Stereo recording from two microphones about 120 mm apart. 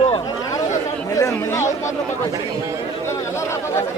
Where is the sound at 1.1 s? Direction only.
25° left (ahead or behind).